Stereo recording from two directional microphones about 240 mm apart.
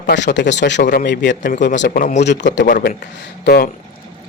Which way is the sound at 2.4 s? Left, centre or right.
Left.